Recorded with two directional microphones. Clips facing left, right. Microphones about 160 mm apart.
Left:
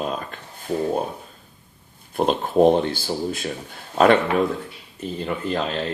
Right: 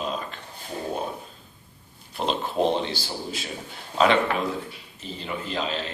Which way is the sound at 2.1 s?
50° left (ahead or behind).